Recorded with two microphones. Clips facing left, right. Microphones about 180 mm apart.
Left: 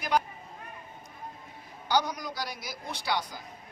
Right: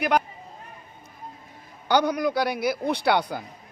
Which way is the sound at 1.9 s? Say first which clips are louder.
Right 7 dB; 60° right (ahead or behind).